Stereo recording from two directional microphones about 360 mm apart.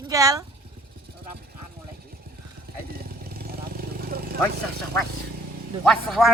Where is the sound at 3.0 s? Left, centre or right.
Right.